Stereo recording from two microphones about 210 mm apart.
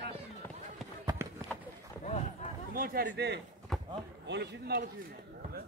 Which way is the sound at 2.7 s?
45° right (ahead or behind).